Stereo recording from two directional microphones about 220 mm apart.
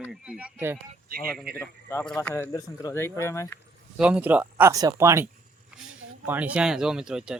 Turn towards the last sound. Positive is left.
turn(degrees=-5)  # may be behind; listen again after turning